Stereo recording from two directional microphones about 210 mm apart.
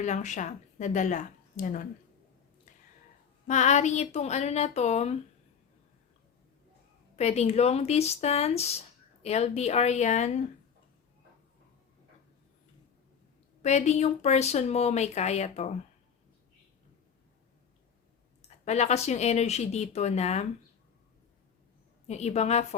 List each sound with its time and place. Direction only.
0.0 s speech: 35° left (ahead or behind)
3.4 s speech: 35° left (ahead or behind)
7.2 s speech: 30° left (ahead or behind)
13.6 s speech: 35° left (ahead or behind)
18.4 s speech: 30° left (ahead or behind)
22.0 s speech: 30° left (ahead or behind)